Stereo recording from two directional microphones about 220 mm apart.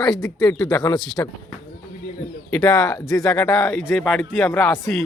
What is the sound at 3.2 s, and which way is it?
Speech, 5° left (ahead or behind).